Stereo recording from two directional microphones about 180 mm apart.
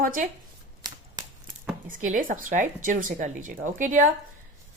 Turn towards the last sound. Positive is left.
turn(degrees=-45)  # may be behind; listen again after turning